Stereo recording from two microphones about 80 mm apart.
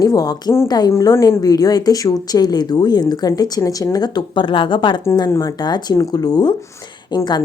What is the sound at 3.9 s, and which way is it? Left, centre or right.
Speech, left.